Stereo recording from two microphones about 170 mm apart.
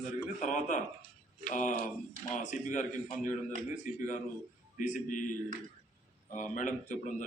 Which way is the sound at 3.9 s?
50° left (ahead or behind).